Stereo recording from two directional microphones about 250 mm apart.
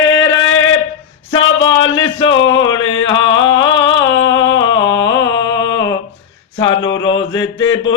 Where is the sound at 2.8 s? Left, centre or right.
Left.